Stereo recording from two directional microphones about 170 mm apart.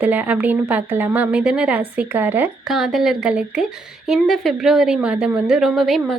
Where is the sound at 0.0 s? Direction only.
10° right (ahead or behind).